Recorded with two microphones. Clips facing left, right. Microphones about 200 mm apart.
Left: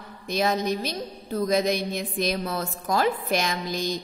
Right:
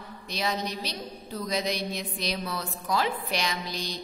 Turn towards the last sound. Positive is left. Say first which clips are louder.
# left 6 dB
turn(degrees=50)  # may be behind; listen again after turning